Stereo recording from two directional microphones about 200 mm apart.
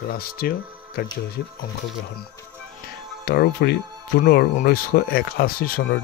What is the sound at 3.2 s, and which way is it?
Speech, 50° left (ahead or behind).